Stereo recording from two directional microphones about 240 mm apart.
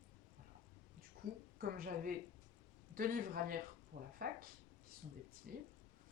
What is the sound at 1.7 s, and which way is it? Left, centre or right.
Speech, right.